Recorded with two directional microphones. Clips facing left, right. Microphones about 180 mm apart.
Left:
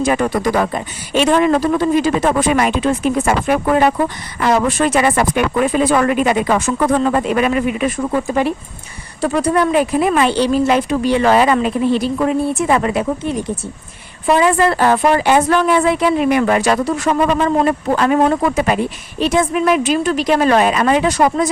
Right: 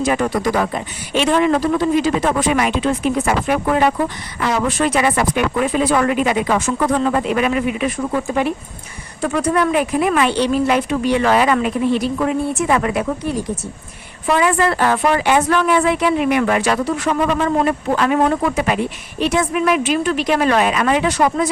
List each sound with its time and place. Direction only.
0.0 s a woman's voice: 50° left (ahead or behind)
9.2 s a woman's voice: 35° left (ahead or behind)